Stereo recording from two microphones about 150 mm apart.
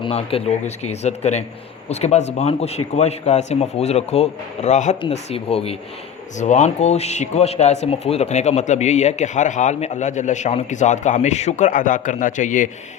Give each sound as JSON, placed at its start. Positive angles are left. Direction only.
{"t": 0.0, "sound": "speech", "side_deg": 40}
{"t": 5.0, "sound": "speech", "side_deg": 40}
{"t": 6.3, "sound": "speech", "side_deg": 50}